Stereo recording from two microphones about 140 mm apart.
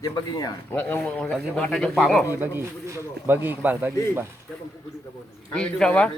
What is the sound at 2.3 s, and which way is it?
Speech, 15° right (ahead or behind).